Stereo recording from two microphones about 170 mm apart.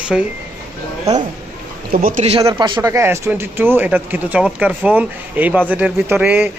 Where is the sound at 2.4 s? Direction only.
25° right (ahead or behind).